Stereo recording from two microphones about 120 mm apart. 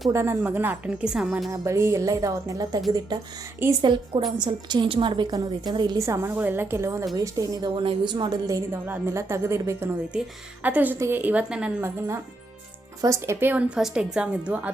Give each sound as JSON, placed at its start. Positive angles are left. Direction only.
{"t": 0.1, "sound": "a woman's voice", "side_deg": -25}
{"t": 1.5, "sound": "speech", "side_deg": -25}
{"t": 3.8, "sound": "a woman's voice", "side_deg": -40}
{"t": 6.0, "sound": "a woman's voice", "side_deg": -25}
{"t": 11.8, "sound": "a woman's voice", "side_deg": -20}